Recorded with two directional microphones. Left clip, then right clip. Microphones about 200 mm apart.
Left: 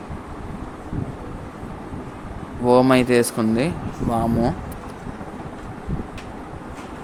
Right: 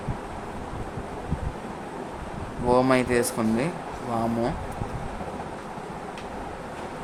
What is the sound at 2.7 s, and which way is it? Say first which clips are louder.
Speech: left 6 dB; 15° left (ahead or behind).